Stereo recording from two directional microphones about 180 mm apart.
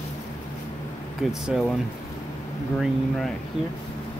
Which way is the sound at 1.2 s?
Centre (ahead or behind).